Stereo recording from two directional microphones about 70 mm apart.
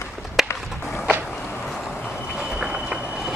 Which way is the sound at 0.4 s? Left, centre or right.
Centre.